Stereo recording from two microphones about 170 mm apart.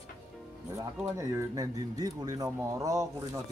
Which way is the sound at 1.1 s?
20° right (ahead or behind).